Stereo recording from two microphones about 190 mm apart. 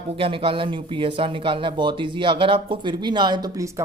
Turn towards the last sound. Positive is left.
turn(degrees=-20)  # may be behind; listen again after turning